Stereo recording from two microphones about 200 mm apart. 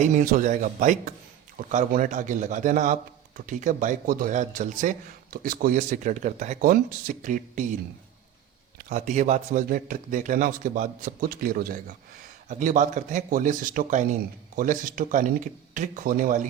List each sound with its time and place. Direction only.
0.0 s a man's voice: 40° right (ahead or behind)
8.9 s a man's voice: 40° right (ahead or behind)